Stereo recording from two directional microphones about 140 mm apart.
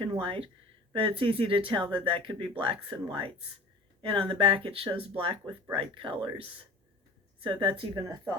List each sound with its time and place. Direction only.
0.0 s speech: 40° right (ahead or behind)